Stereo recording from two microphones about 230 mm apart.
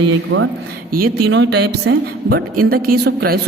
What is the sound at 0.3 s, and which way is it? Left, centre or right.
A woman's voice, right.